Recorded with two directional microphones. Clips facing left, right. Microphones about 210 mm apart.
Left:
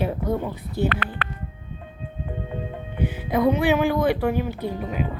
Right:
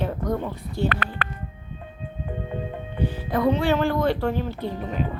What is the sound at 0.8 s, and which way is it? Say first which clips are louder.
Speech: even; 45° right (ahead or behind).